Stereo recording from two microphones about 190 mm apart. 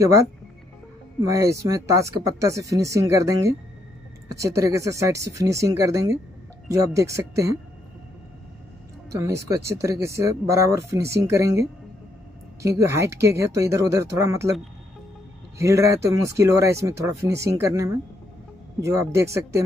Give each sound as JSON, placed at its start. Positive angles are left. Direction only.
{"t": 0.0, "sound": "speech", "side_deg": -15}
{"t": 9.2, "sound": "speech", "side_deg": -15}
{"t": 12.6, "sound": "speech", "side_deg": -15}
{"t": 15.5, "sound": "speech", "side_deg": -15}